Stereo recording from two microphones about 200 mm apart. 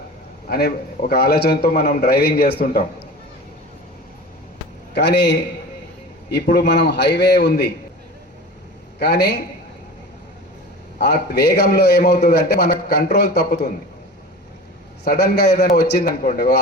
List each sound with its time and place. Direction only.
0.4 s a man's voice: 50° left (ahead or behind)
4.9 s a man's voice: 60° left (ahead or behind)
9.0 s a man's voice: 55° left (ahead or behind)
10.9 s a man's voice: 55° left (ahead or behind)
15.1 s a man's voice: 55° left (ahead or behind)